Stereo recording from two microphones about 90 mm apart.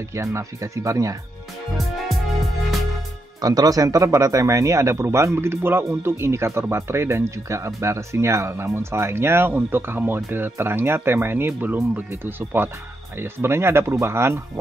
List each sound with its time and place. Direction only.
0.1 s speech: 35° right (ahead or behind)
1.8 s music: centre (ahead or behind)
3.3 s speech: 45° right (ahead or behind)